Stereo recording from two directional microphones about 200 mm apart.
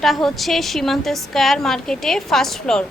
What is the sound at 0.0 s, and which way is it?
Speech, centre (ahead or behind).